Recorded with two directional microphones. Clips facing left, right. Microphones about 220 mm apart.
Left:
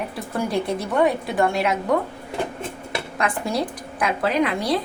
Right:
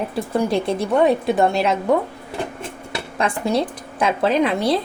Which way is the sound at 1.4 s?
25° right (ahead or behind).